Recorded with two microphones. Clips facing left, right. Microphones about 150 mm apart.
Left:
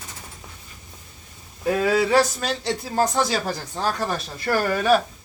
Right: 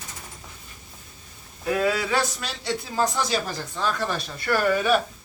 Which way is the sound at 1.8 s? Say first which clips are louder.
Left 7 dB; 35° left (ahead or behind).